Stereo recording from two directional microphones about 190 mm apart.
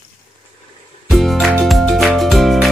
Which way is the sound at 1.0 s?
Centre (ahead or behind).